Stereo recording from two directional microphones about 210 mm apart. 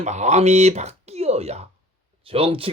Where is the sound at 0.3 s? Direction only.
30° right (ahead or behind).